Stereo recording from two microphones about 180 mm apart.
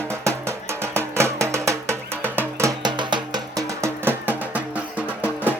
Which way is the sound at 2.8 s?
25° right (ahead or behind).